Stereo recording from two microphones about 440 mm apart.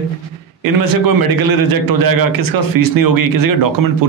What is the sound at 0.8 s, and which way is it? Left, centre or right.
Speech, right.